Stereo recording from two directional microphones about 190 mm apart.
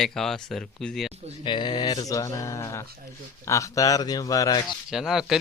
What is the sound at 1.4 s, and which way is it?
Speech, 25° left (ahead or behind).